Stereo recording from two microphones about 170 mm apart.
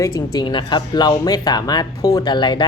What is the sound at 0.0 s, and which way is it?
Speech, 25° left (ahead or behind).